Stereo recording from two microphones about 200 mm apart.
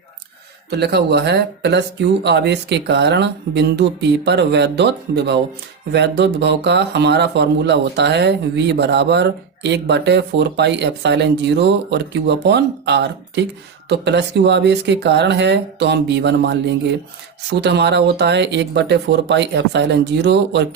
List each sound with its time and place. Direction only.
0.7 s speech: 55° right (ahead or behind)